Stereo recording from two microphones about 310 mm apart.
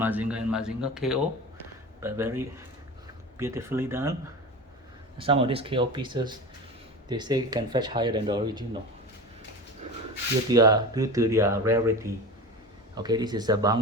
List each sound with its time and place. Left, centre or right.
0.0 s speech: centre
5.1 s speech: centre
10.5 s speech: centre